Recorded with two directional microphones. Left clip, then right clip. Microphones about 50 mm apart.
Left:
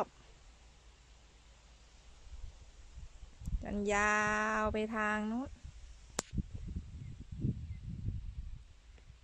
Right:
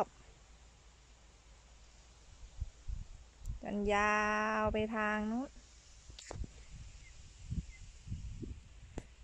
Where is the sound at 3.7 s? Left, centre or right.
Left.